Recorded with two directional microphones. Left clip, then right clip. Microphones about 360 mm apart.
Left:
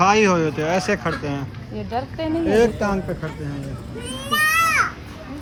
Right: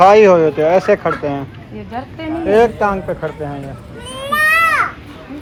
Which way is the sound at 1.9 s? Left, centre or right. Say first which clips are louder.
Left 1 dB; left.